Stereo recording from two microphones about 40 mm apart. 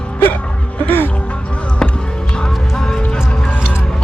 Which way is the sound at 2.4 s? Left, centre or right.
Centre.